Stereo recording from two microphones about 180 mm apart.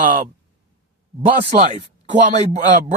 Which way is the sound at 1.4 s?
35° right (ahead or behind).